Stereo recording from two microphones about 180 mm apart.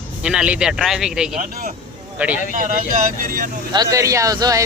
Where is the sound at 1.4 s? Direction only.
50° right (ahead or behind).